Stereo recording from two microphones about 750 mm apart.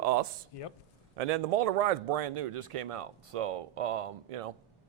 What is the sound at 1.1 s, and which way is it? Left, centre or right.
A man's voice, right.